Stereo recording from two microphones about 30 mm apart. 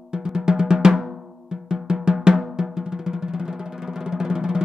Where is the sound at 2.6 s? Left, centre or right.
Centre.